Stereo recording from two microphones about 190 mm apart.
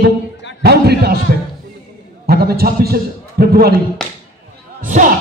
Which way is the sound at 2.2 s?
55° right (ahead or behind).